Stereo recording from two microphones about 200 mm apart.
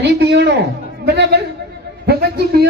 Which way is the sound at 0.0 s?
60° right (ahead or behind).